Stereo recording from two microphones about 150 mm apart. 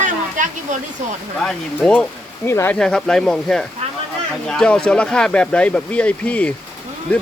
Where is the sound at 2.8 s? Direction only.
5° left (ahead or behind).